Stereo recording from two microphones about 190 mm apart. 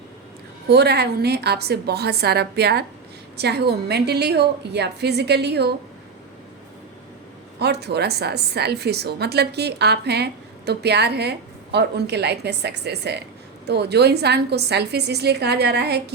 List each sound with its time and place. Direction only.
0.7 s a woman's voice: 60° right (ahead or behind)
7.6 s a woman's voice: 60° right (ahead or behind)